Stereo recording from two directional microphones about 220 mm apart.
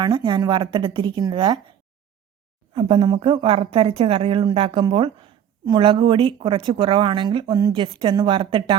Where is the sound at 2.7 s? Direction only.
25° right (ahead or behind).